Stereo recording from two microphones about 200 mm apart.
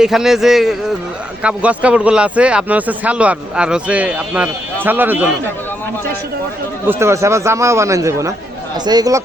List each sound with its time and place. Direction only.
0.0 s a man's voice: centre (ahead or behind)
6.8 s a man's voice: 15° right (ahead or behind)